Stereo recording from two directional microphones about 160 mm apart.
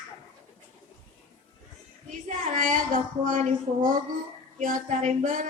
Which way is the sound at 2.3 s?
55° right (ahead or behind).